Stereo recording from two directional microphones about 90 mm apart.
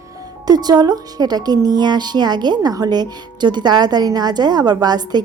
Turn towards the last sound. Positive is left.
turn(degrees=-50)  # may be behind; listen again after turning